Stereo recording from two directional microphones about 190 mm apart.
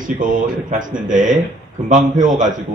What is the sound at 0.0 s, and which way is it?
Speech, 45° right (ahead or behind).